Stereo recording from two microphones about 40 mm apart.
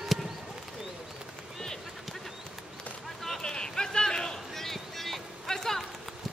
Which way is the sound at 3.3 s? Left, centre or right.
Centre.